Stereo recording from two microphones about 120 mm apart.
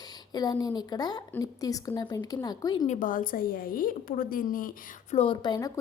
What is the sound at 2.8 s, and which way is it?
Speech, 85° left.